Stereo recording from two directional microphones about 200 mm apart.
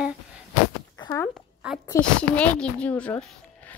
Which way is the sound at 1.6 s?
5° right (ahead or behind).